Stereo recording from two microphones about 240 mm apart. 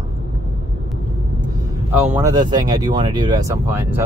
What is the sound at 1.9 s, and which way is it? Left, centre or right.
Speech, centre.